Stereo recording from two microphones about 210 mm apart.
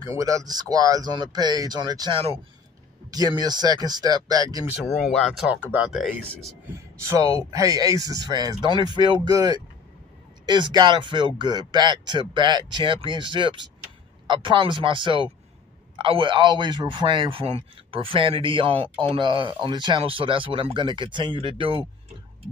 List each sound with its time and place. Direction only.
0.2 s speech: 15° right (ahead or behind)
4.8 s speech: centre (ahead or behind)
7.0 s speech: 15° right (ahead or behind)